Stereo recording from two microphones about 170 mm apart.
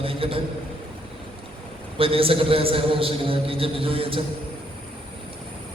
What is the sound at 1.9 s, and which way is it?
A man's voice, 35° right (ahead or behind).